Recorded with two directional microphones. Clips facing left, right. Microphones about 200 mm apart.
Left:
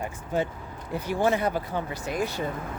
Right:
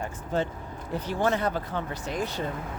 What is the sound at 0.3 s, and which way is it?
Speech, 10° left (ahead or behind).